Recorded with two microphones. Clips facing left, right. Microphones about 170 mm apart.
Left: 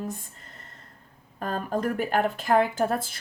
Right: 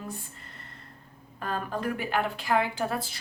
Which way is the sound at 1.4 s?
45° left (ahead or behind).